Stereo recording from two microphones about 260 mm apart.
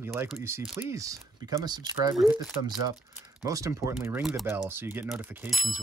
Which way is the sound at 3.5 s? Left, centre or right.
Centre.